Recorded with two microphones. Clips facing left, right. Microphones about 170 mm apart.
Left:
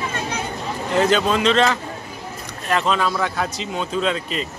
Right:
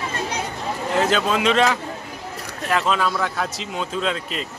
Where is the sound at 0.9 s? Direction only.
Centre (ahead or behind).